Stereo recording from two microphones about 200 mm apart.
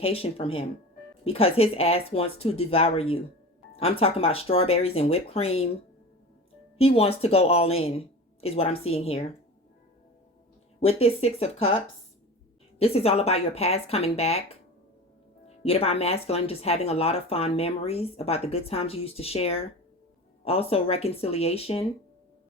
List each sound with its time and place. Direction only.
0.0 s speech: 30° left (ahead or behind)
6.7 s speech: 30° left (ahead or behind)
10.8 s speech: 30° left (ahead or behind)
12.8 s speech: 30° left (ahead or behind)